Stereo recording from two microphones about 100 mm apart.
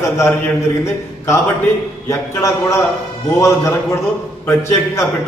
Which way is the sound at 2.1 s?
30° left (ahead or behind).